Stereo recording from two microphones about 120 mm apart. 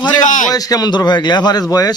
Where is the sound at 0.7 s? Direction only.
35° left (ahead or behind).